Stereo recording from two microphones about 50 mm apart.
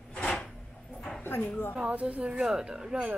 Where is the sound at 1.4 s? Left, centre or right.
Left.